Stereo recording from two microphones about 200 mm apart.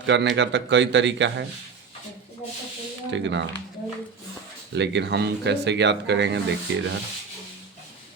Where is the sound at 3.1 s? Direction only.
65° right (ahead or behind).